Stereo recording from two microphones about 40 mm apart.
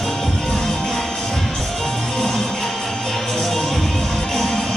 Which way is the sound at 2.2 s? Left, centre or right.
Centre.